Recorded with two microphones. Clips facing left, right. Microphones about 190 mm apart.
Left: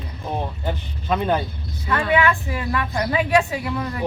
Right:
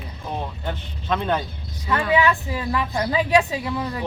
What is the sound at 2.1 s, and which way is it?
A woman's voice, 20° right (ahead or behind).